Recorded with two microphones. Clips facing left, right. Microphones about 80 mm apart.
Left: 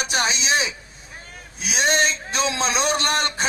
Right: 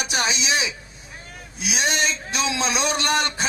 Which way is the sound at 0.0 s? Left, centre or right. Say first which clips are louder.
Left 1 dB; left.